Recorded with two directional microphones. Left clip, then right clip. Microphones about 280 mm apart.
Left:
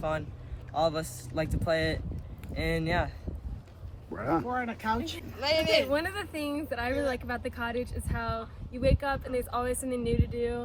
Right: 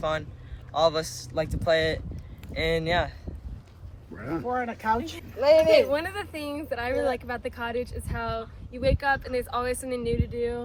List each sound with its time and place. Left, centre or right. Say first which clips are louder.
0.0 s speech: right 4 dB; centre
4.1 s speech: left 4 dB; centre
4.4 s speech: right 4 dB; right
5.7 s speech: right 5 dB; centre